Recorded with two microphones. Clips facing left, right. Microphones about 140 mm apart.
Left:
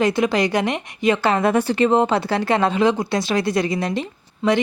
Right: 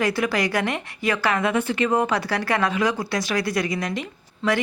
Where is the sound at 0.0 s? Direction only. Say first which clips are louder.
Left 4 dB; 20° left (ahead or behind).